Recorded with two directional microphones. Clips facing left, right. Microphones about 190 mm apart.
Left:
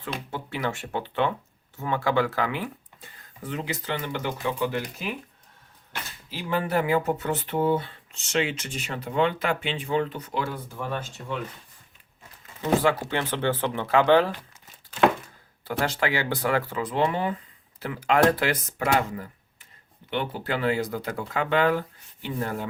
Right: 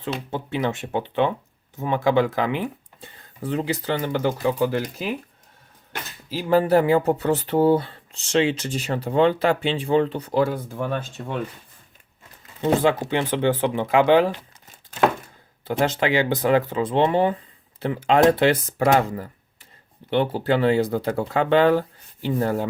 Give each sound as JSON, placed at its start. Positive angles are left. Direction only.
{"t": 0.3, "sound": "speech", "side_deg": -20}
{"t": 3.4, "sound": "speech", "side_deg": -35}
{"t": 6.3, "sound": "speech", "side_deg": -35}
{"t": 10.8, "sound": "speech", "side_deg": -55}
{"t": 12.6, "sound": "speech", "side_deg": -20}
{"t": 15.6, "sound": "speech", "side_deg": -20}
{"t": 20.1, "sound": "speech", "side_deg": -30}